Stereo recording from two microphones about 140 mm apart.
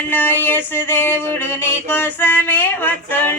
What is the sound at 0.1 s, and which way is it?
Music, 15° left (ahead or behind).